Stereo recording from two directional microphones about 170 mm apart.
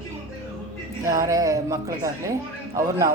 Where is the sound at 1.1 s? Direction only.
20° right (ahead or behind).